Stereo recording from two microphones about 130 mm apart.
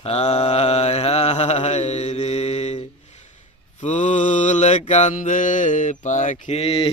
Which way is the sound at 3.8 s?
70° left (ahead or behind).